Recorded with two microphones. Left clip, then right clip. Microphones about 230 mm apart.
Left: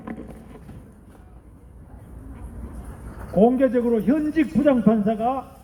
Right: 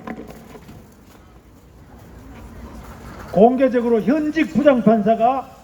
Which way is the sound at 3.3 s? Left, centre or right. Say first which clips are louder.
Right 4 dB; right.